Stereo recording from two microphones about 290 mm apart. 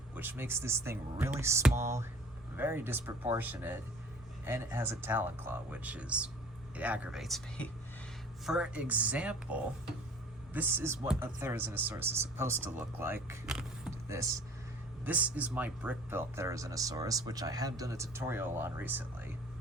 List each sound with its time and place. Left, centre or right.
0.1 s speech: centre